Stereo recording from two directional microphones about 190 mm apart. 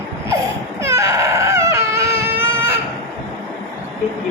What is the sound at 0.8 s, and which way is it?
Baby cry, 15° right (ahead or behind).